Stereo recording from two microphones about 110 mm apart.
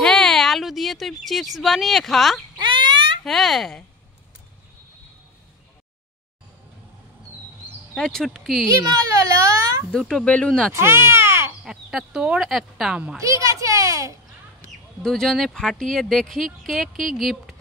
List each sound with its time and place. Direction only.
0.0 s speech: 5° left (ahead or behind)
2.6 s a sound: 45° right (ahead or behind)
3.3 s speech: 5° left (ahead or behind)
7.9 s speech: 5° left (ahead or behind)
9.0 s speech: 30° right (ahead or behind)
9.8 s speech: 5° left (ahead or behind)
10.7 s speech: 25° right (ahead or behind)
11.6 s speech: 5° right (ahead or behind)
13.2 s a child's voice: 30° right (ahead or behind)
14.6 s speech: 5° left (ahead or behind)